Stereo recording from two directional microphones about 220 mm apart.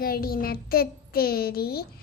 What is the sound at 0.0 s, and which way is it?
A child's voice, 45° left (ahead or behind).